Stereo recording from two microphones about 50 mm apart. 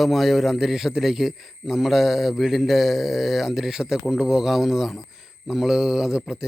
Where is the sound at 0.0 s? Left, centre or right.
Centre.